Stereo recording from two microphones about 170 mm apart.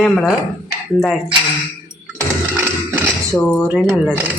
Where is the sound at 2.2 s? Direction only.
15° right (ahead or behind).